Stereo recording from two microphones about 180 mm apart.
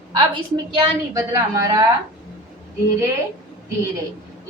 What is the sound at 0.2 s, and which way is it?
A woman's voice, 25° right (ahead or behind).